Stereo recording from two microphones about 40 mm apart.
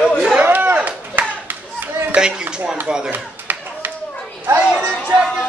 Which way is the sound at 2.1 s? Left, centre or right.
Right.